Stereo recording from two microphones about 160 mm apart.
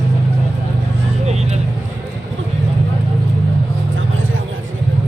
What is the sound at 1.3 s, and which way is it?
Vehicle, 45° right (ahead or behind).